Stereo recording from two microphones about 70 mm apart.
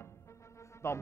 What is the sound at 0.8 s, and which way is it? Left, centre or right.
Speech, left.